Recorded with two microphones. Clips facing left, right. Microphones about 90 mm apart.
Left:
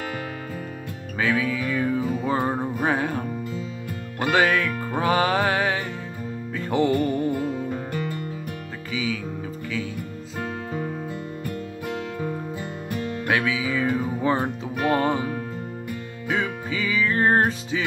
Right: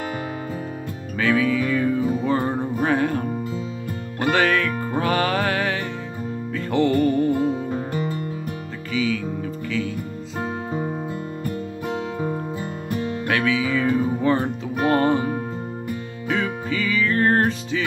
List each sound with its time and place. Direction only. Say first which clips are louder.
1.1 s music: right 4 dB; 15° left (ahead or behind)
4.2 s music: right 1 dB; 15° left (ahead or behind)
7.3 s music: right 4 dB; 25° right (ahead or behind)
8.9 s music: right 5 dB; 10° left (ahead or behind)
10.4 s music: right 3 dB; 25° right (ahead or behind)
13.3 s music: right 2 dB; 15° left (ahead or behind)
14.8 s music: right 3 dB; 35° right (ahead or behind)
15.1 s music: right 4 dB; 25° right (ahead or behind)
16.3 s music: right 2 dB; 15° left (ahead or behind)